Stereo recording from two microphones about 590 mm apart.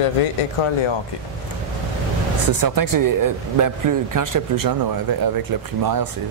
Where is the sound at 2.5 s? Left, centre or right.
Right.